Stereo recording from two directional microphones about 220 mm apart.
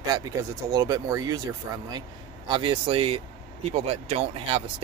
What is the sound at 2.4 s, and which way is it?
Speech, 20° right (ahead or behind).